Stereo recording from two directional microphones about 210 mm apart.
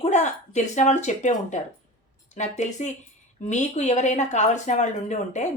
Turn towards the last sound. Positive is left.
turn(degrees=35)  # may be behind; listen again after turning